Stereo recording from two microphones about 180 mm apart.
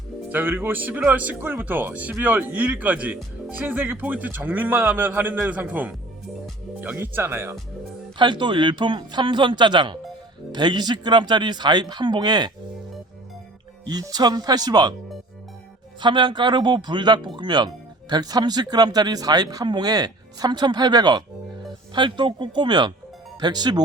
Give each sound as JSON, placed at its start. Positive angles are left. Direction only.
{"t": 0.3, "sound": "speech", "side_deg": -10}
{"t": 8.2, "sound": "speech", "side_deg": -25}
{"t": 13.8, "sound": "speech", "side_deg": -20}
{"t": 16.0, "sound": "speech", "side_deg": -25}